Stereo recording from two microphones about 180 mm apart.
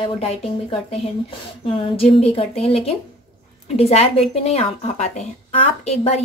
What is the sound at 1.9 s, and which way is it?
A woman's voice, 30° left (ahead or behind).